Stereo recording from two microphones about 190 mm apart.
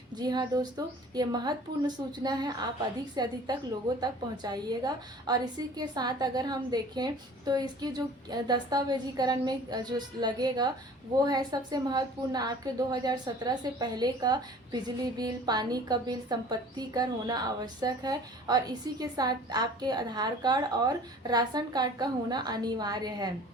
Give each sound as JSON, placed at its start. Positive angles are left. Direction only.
{"t": 0.2, "sound": "a woman's voice", "side_deg": -20}